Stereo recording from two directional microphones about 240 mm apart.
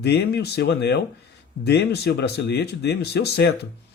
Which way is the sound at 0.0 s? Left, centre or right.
Left.